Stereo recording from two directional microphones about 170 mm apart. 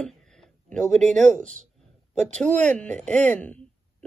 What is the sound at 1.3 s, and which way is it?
Speech, 45° right (ahead or behind).